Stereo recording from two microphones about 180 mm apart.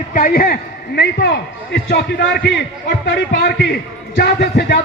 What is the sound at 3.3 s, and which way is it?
A man's voice, 60° left (ahead or behind).